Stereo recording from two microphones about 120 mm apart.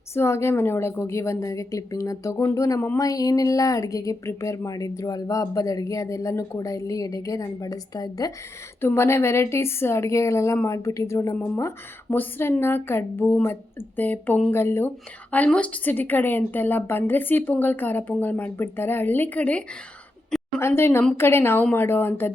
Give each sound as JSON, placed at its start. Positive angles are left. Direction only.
{"t": 0.1, "sound": "speech", "side_deg": 20}
{"t": 8.8, "sound": "speech", "side_deg": 20}
{"t": 11.3, "sound": "a woman's voice", "side_deg": 15}